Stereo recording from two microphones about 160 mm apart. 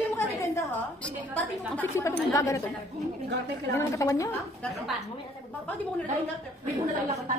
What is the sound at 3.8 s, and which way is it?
Speech, 20° left (ahead or behind).